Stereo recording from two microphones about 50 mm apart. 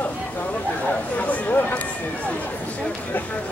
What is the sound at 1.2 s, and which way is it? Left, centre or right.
Speech, left.